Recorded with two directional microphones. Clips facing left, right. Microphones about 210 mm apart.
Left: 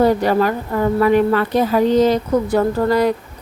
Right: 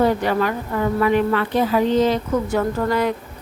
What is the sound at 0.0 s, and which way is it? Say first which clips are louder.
A woman's voice: left 4 dB; 40° left (ahead or behind).